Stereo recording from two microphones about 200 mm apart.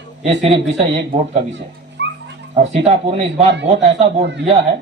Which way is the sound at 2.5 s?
35° right (ahead or behind).